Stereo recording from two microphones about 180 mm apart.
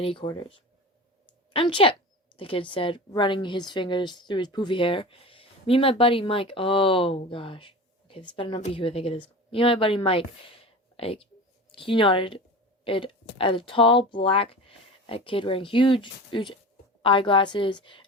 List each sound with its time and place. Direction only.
0.0 s a woman's voice: 30° left (ahead or behind)